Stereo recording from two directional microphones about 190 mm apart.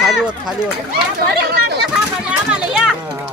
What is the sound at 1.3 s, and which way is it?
Speech, 55° right (ahead or behind).